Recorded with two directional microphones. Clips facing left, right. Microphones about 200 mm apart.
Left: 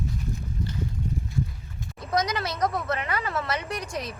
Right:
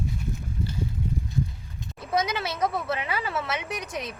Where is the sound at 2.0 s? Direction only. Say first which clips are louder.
Even; 5° right (ahead or behind).